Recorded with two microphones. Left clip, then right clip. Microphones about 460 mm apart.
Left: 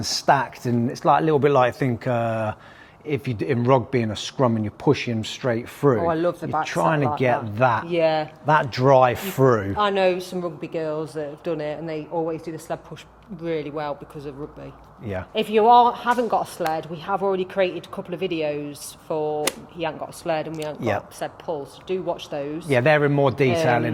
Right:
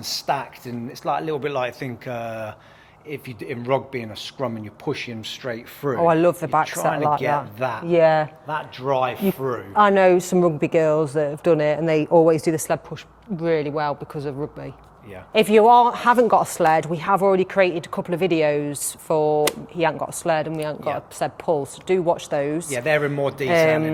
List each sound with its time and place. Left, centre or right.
0.0 s speech: left
6.1 s speech: right
6.7 s speech: left
7.9 s speech: right
8.4 s speech: left
9.7 s speech: right
11.9 s speech: right
13.3 s speech: right
21.2 s speech: right
22.7 s speech: left